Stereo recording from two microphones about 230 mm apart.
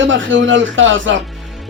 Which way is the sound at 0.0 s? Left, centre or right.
Right.